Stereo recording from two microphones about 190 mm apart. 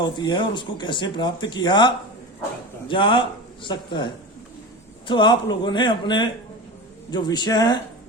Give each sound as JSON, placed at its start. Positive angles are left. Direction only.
{"t": 0.0, "sound": "speech", "side_deg": 25}